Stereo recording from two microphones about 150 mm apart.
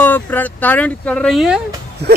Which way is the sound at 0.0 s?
10° left (ahead or behind).